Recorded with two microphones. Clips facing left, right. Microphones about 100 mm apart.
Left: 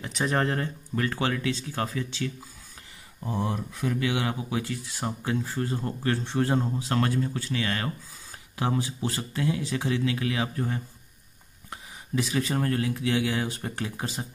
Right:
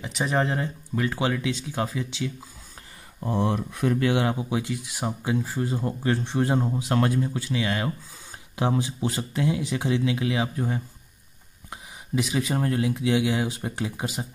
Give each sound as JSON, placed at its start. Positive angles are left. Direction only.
{"t": 0.0, "sound": "speech", "side_deg": -5}
{"t": 3.3, "sound": "speech", "side_deg": -65}
{"t": 3.9, "sound": "speech", "side_deg": -40}
{"t": 4.5, "sound": "speech", "side_deg": -15}